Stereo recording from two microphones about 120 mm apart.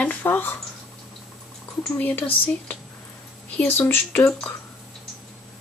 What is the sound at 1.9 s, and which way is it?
Speech, 15° left (ahead or behind).